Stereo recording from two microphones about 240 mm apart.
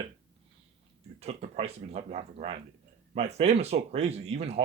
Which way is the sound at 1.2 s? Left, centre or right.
Right.